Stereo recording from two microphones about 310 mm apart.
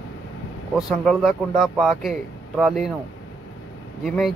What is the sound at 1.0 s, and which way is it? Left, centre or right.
A man's voice, centre.